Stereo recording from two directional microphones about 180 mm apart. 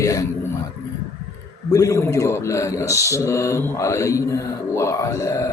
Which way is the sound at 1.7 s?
15° left (ahead or behind).